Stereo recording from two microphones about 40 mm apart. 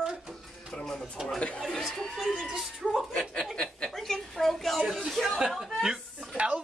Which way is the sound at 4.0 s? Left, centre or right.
Centre.